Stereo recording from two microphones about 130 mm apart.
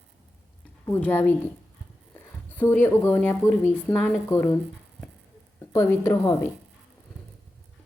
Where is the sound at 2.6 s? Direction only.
15° left (ahead or behind).